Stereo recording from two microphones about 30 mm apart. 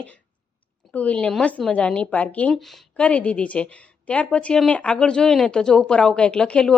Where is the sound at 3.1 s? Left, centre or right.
Left.